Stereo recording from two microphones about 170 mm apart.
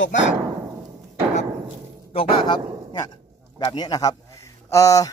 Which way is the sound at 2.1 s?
30° left (ahead or behind).